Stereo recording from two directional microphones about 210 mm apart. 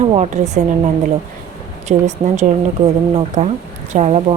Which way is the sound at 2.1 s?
35° right (ahead or behind).